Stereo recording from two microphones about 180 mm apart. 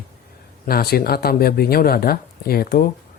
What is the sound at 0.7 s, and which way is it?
Speech, 55° left (ahead or behind).